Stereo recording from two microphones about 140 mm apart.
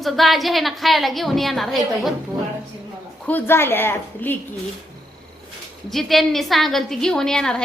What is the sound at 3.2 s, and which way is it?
A woman's voice, 15° left (ahead or behind).